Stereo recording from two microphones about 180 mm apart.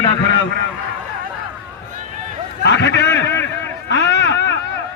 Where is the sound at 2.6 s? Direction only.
75° left (ahead or behind).